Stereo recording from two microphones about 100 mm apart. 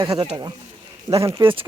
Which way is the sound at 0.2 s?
40° right (ahead or behind).